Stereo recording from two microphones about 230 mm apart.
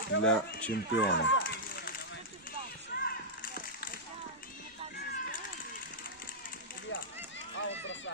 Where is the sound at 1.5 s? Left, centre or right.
Left.